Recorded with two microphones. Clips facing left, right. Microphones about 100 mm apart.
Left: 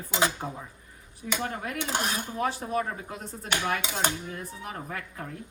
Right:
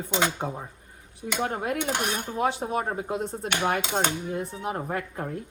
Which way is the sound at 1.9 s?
20° right (ahead or behind).